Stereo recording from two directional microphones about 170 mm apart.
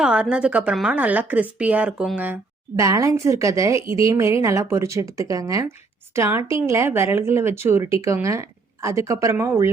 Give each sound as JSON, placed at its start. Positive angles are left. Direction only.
{"t": 0.0, "sound": "a woman's voice", "side_deg": -5}